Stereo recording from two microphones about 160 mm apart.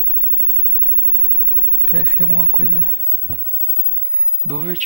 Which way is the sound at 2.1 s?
35° right (ahead or behind).